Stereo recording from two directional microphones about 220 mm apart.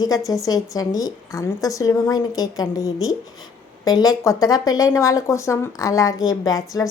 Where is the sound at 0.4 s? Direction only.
15° left (ahead or behind).